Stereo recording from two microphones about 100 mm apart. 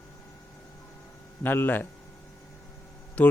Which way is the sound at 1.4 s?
20° left (ahead or behind).